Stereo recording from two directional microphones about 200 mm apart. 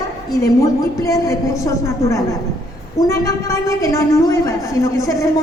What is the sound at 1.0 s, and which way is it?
A woman's voice, 15° left (ahead or behind).